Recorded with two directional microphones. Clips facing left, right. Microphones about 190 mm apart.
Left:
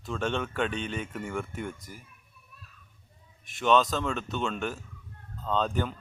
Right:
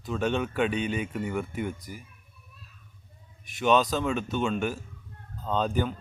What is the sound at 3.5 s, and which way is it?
Speech, 5° right (ahead or behind).